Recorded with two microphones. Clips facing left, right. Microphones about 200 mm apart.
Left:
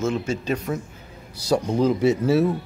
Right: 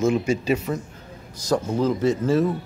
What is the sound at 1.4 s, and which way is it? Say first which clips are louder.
Cutlery: left 2 dB; 10° left (ahead or behind).